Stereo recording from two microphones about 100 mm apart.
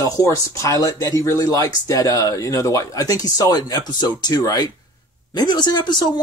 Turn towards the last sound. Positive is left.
turn(degrees=45)  # may be behind; listen again after turning